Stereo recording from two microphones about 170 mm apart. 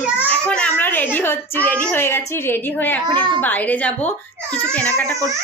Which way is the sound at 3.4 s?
10° left (ahead or behind).